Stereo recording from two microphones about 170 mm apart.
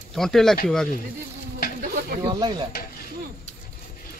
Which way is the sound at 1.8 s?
65° right (ahead or behind).